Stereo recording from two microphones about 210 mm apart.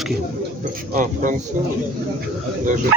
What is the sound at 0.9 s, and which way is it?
Speech, 40° right (ahead or behind).